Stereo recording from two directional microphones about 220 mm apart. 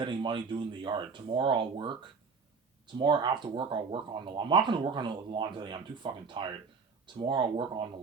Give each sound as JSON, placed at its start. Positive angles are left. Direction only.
{"t": 0.0, "sound": "speech", "side_deg": -20}